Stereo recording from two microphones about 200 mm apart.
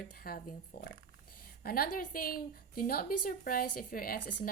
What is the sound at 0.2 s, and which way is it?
A woman's voice, 45° left (ahead or behind).